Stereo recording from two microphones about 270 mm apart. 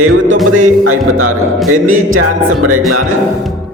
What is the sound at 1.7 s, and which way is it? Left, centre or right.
Music, right.